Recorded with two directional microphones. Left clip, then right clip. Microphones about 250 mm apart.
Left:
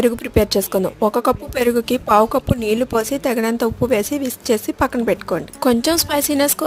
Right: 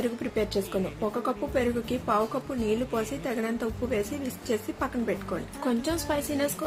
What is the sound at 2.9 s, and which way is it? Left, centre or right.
A woman's voice, left.